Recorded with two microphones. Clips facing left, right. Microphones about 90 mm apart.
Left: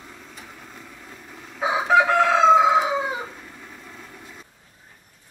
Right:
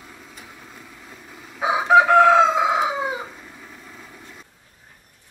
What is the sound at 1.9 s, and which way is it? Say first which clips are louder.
Chicken: right 5 dB; 35° right (ahead or behind).